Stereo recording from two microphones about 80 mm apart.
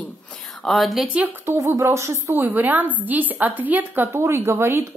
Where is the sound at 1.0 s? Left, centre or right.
Centre.